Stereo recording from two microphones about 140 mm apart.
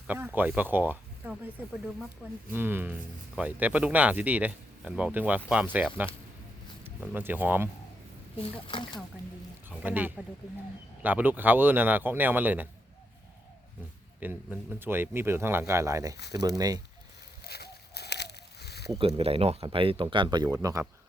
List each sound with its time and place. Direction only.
0.1 s speech: 10° right (ahead or behind)
2.5 s speech: 15° right (ahead or behind)
8.6 s speech: 35° left (ahead or behind)
9.6 s speech: 10° right (ahead or behind)
14.2 s speech: 15° right (ahead or behind)
18.9 s speech: 45° right (ahead or behind); by 20.8 s 25° right (ahead or behind)